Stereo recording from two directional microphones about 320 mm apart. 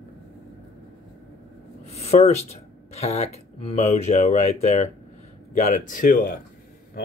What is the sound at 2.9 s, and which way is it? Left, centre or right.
Speech, centre.